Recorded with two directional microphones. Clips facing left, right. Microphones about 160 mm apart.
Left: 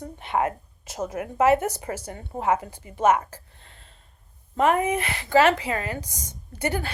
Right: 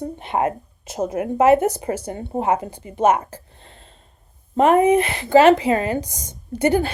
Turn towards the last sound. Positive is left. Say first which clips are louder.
# right 10 dB
turn(degrees=-20)  # may be behind; listen again after turning